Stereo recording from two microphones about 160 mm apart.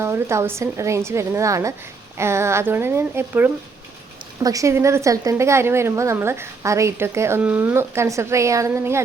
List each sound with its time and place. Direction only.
0.0 s a woman's voice: 15° right (ahead or behind)